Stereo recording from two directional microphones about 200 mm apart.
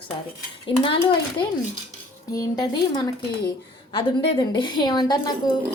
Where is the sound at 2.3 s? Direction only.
20° left (ahead or behind).